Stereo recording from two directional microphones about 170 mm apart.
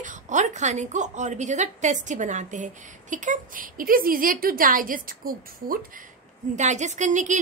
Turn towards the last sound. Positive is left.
turn(degrees=-45)  # may be behind; listen again after turning